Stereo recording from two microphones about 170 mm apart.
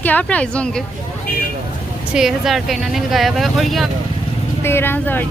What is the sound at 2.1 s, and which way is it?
Speech, centre (ahead or behind).